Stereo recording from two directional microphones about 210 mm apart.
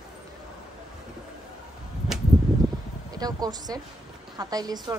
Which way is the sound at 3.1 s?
20° right (ahead or behind).